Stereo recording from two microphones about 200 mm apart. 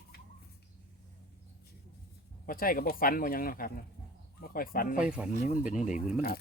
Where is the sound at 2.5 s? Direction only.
45° left (ahead or behind).